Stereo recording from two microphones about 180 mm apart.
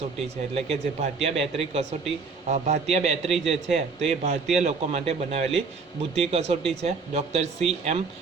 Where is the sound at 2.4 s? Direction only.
40° right (ahead or behind).